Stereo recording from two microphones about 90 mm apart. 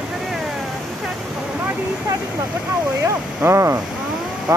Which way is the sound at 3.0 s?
30° right (ahead or behind).